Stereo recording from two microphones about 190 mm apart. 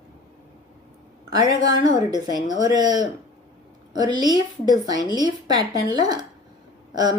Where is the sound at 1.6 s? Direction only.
20° right (ahead or behind).